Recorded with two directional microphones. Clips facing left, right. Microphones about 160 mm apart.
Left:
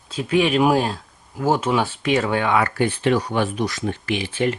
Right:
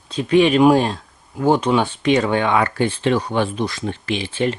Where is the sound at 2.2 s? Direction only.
20° right (ahead or behind).